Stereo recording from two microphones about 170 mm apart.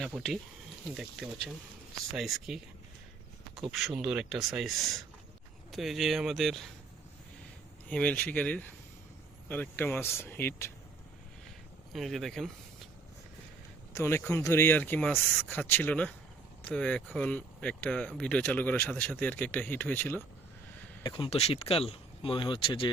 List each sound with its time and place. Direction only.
0.1 s speech: centre (ahead or behind)
3.7 s speech: centre (ahead or behind)
7.9 s speech: 5° left (ahead or behind)
11.9 s speech: centre (ahead or behind)
13.9 s speech: 15° left (ahead or behind)
21.0 s speech: 30° left (ahead or behind)